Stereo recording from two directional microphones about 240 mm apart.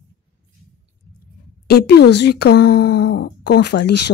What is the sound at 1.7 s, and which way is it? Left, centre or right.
Speech, left.